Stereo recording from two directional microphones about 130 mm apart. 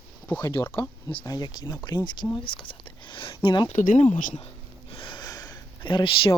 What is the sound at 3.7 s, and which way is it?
Speech, 75° left (ahead or behind).